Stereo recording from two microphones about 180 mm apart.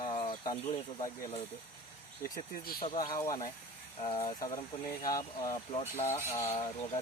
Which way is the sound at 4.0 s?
30° left (ahead or behind).